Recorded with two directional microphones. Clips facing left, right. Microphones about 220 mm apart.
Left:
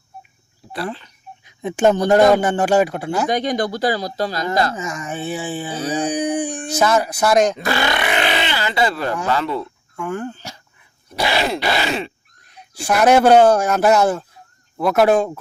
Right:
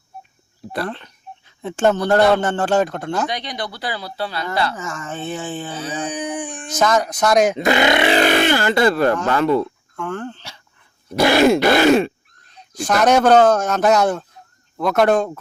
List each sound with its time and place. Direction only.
1.5 s speech: 15° left (ahead or behind)
3.2 s speech: 45° left (ahead or behind)
4.7 s speech: 15° left (ahead or behind)
5.7 s speech: 40° left (ahead or behind)
6.7 s speech: 5° left (ahead or behind)
7.6 s speech: 20° right (ahead or behind)
8.1 s speech: 45° right (ahead or behind)
9.3 s groan: 50° right (ahead or behind)
9.9 s speech: 10° left (ahead or behind)
11.1 s groan: 50° right (ahead or behind)
12.5 s speech: 10° left (ahead or behind)